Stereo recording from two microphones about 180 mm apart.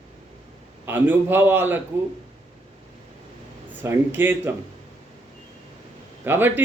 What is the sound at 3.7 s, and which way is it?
Speech, 10° right (ahead or behind).